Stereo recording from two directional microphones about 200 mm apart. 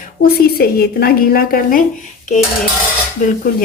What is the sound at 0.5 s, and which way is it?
A woman's voice, 50° left (ahead or behind).